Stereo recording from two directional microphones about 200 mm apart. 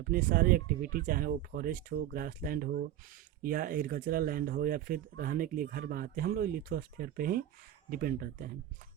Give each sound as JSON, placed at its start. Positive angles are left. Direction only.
{"t": 0.0, "sound": "speech", "side_deg": -45}